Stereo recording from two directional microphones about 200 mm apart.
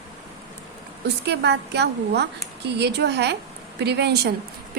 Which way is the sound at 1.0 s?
55° right (ahead or behind).